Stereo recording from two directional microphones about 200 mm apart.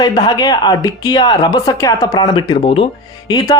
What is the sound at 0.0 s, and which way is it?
Speech, 20° left (ahead or behind).